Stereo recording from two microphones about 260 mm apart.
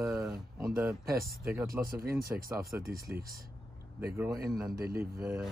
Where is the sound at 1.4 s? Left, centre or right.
Centre.